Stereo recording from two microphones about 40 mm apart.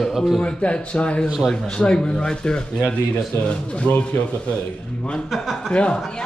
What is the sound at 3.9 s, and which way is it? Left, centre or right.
Speech, left.